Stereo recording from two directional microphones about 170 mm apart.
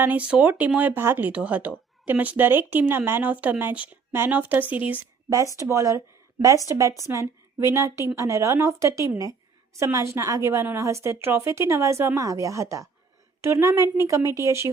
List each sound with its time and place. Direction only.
0.0 s a woman's voice: 10° right (ahead or behind)